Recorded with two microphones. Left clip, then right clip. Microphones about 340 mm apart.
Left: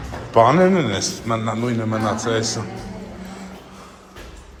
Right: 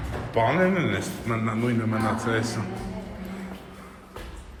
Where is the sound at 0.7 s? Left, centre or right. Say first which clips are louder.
Left 6 dB; centre.